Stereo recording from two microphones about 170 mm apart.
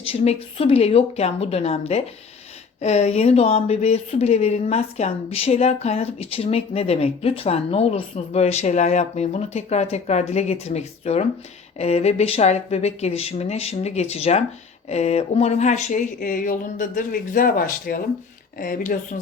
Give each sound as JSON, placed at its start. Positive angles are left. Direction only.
{"t": 0.0, "sound": "speech", "side_deg": 35}